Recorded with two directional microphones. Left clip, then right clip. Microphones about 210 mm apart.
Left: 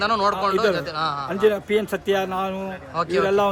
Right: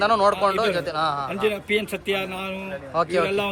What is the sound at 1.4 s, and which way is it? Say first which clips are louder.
Speech: left 6 dB; 15° left (ahead or behind).